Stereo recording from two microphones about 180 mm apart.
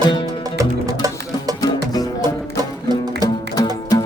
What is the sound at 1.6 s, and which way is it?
Music, 20° left (ahead or behind).